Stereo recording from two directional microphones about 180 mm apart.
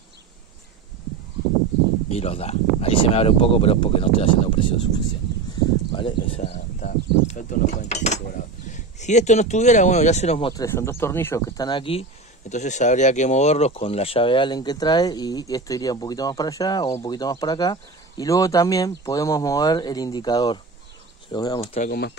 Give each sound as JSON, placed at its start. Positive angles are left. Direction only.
{"t": 2.0, "sound": "speech", "side_deg": 35}
{"t": 5.9, "sound": "speech", "side_deg": 30}
{"t": 10.5, "sound": "speech", "side_deg": 15}
{"t": 21.7, "sound": "speech", "side_deg": 50}